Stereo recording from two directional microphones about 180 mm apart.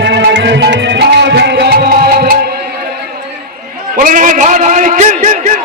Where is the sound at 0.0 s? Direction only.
75° right (ahead or behind); by 2.3 s 55° right (ahead or behind).